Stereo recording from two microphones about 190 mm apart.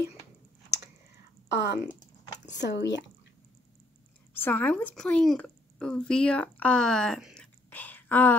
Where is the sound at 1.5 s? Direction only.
60° left (ahead or behind).